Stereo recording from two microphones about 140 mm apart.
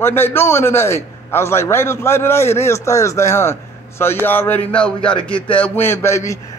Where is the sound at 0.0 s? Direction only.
15° left (ahead or behind).